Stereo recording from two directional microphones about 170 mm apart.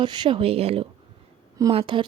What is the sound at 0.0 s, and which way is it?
Speech, 25° right (ahead or behind).